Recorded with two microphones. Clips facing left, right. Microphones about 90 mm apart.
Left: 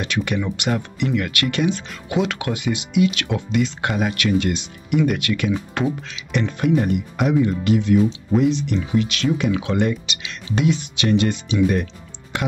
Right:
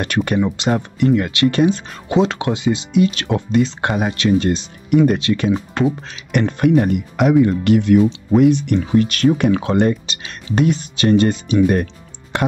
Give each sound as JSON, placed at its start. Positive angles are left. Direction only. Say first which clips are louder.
{"t": 0.0, "sound": "speech", "louder": "right 4 dB", "side_deg": -45}
{"t": 0.4, "sound": "speech", "louder": "right 5 dB", "side_deg": -30}
{"t": 6.3, "sound": "speech", "louder": "right 5 dB", "side_deg": -55}